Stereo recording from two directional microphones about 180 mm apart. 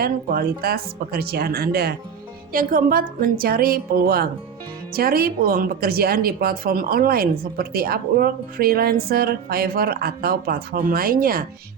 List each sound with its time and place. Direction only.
0.0 s a woman's voice: 55° right (ahead or behind)